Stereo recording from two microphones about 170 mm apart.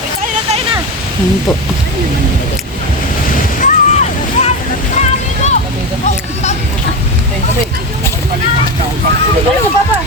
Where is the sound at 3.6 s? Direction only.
45° left (ahead or behind).